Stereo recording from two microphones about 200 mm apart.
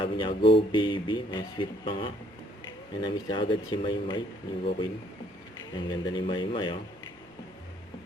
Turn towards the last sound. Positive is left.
turn(degrees=25)  # may be behind; listen again after turning